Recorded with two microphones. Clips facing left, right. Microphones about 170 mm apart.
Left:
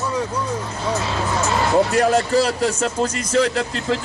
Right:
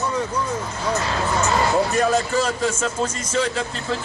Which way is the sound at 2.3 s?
35° left (ahead or behind).